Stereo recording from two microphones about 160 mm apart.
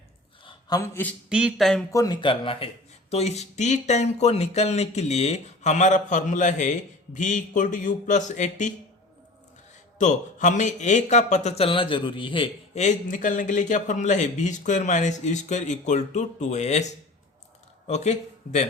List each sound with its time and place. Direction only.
0.4 s a sound: 25° left (ahead or behind)
1.3 s speech: 5° right (ahead or behind)
1.9 s speech: 20° left (ahead or behind)
2.2 s speech: 35° left (ahead or behind); by 8.7 s 50° left (ahead or behind)
10.0 s speech: 50° left (ahead or behind); by 12.5 s 30° left (ahead or behind)
12.7 s speech: 50° left (ahead or behind)